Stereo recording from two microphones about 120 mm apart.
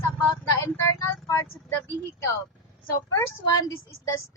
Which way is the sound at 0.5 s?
25° left (ahead or behind).